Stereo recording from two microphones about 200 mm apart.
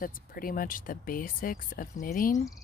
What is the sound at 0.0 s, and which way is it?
Speech, 45° left (ahead or behind).